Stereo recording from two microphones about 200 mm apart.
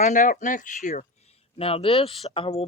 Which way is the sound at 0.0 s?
40° left (ahead or behind).